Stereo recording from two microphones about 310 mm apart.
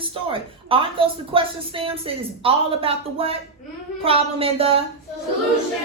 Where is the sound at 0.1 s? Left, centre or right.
Centre.